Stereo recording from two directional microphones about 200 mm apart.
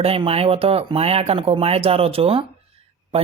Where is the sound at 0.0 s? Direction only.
30° right (ahead or behind).